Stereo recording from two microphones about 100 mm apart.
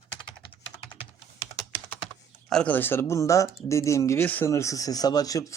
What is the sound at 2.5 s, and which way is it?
Speech, 5° left (ahead or behind).